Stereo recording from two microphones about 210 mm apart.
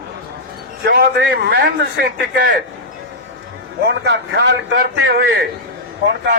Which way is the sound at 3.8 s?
55° right (ahead or behind).